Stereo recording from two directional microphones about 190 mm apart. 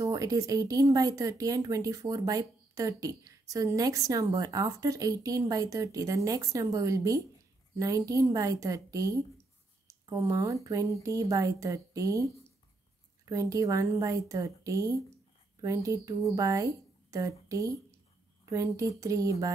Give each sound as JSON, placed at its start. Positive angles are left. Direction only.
{"t": 0.0, "sound": "speech", "side_deg": -15}